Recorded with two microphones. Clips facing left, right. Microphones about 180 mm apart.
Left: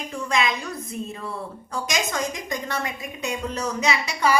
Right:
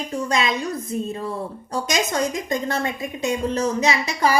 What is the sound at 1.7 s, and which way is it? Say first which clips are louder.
A woman's voice: right 4 dB; 30° right (ahead or behind).